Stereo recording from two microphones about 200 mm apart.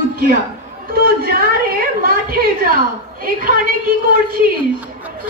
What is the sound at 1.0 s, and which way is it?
A woman's voice, 50° right (ahead or behind).